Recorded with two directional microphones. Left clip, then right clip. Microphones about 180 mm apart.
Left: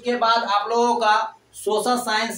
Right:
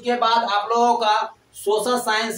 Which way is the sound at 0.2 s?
15° left (ahead or behind).